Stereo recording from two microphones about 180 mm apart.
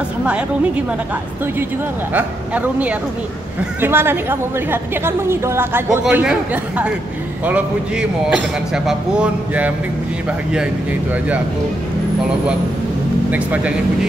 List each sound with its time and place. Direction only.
2.1 s a woman's voice: 10° right (ahead or behind)
13.3 s a woman's voice: 10° right (ahead or behind)